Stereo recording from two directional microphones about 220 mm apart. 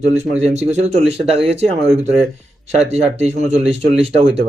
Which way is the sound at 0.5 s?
30° right (ahead or behind).